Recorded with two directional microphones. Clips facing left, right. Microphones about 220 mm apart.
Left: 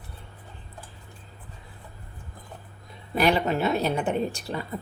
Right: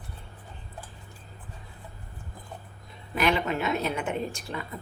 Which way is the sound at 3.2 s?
35° left (ahead or behind).